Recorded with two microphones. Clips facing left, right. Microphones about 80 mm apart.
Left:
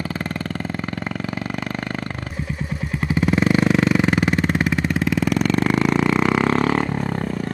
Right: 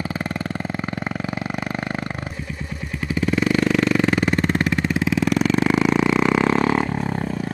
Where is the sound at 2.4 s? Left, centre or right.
Centre.